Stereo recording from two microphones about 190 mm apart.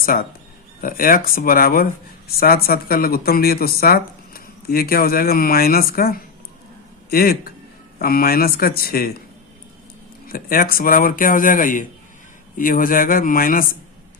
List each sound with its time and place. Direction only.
0.0 s speech: 50° left (ahead or behind)
10.2 s speech: 50° left (ahead or behind)